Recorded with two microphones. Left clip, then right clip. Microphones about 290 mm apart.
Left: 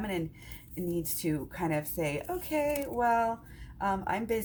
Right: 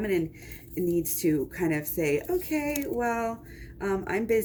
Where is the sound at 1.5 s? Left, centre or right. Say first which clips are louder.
Right 3 dB; left.